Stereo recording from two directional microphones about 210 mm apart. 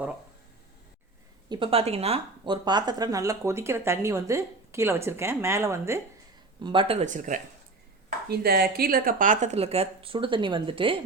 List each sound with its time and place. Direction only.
1.5 s speech: 25° right (ahead or behind)
8.3 s speech: 50° right (ahead or behind); by 10.9 s 25° right (ahead or behind)